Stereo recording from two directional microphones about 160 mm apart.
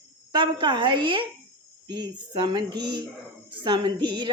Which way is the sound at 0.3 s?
30° right (ahead or behind).